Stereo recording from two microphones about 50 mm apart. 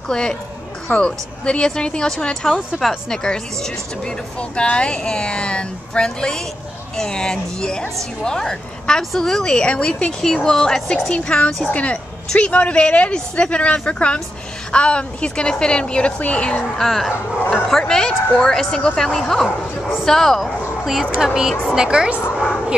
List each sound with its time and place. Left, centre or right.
0.1 s speech: centre
10.2 s speech: centre
16.7 s a woman's voice: centre